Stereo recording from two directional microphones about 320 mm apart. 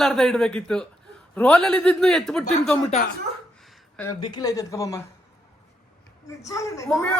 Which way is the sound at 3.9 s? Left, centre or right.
Centre.